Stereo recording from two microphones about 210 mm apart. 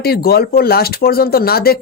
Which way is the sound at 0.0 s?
45° left (ahead or behind).